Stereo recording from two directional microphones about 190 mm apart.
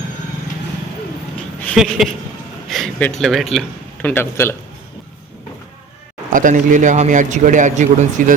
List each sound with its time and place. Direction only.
1.7 s speech: centre (ahead or behind)
2.6 s a sound: centre (ahead or behind)
3.2 s speech: centre (ahead or behind)
6.3 s a man's voice: 45° right (ahead or behind)